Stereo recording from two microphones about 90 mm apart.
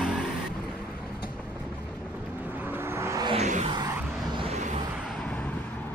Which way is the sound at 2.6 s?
25° right (ahead or behind).